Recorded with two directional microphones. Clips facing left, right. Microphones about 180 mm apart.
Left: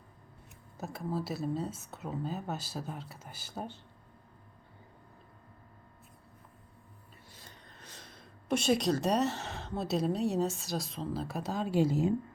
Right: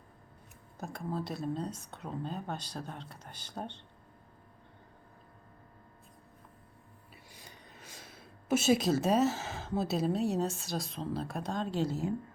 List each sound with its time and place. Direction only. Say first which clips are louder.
0.8 s speech: left 1 dB; 5° left (ahead or behind)
7.3 s speech: right 1 dB; 10° right (ahead or behind); by 12.1 s 15° left (ahead or behind)